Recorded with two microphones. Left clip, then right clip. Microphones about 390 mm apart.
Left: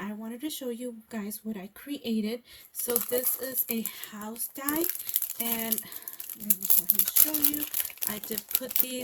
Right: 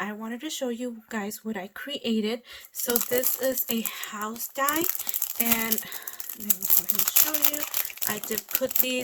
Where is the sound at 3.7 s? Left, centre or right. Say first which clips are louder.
Right 5 dB; centre.